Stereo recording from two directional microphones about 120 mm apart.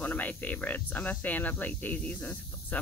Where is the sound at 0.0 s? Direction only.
15° left (ahead or behind).